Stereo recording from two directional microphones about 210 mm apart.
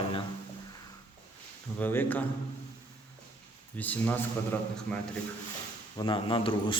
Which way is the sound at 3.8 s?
10° left (ahead or behind).